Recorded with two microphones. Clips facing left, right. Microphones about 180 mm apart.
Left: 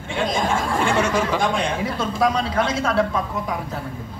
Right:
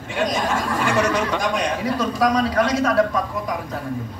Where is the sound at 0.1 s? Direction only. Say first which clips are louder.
Even; 25° left (ahead or behind).